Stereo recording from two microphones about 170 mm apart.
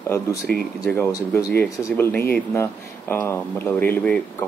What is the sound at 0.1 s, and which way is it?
Speech, 15° left (ahead or behind).